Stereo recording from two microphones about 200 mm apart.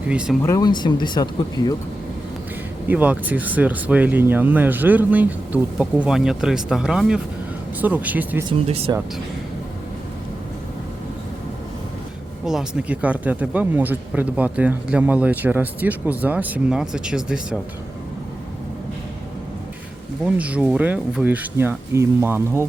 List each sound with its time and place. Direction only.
0.1 s speech: 5° right (ahead or behind)
0.4 s speech: 20° left (ahead or behind)
2.8 s speech: 10° right (ahead or behind)
8.4 s speech: 30° right (ahead or behind)
12.5 s speech: 5° right (ahead or behind)
20.2 s speech: 5° right (ahead or behind)